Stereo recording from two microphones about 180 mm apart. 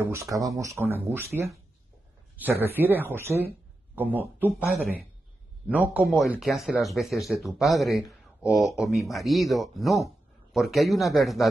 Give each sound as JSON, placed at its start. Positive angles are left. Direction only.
{"t": 0.0, "sound": "speech", "side_deg": -15}